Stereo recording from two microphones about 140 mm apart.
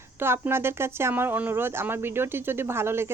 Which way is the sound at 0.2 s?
15° right (ahead or behind).